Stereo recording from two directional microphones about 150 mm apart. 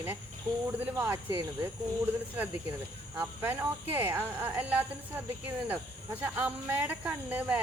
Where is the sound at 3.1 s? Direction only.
10° right (ahead or behind).